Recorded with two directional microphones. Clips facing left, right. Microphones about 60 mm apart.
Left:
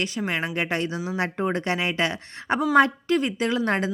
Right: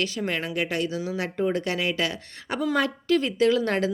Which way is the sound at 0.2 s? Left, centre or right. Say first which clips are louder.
Left 1 dB; centre.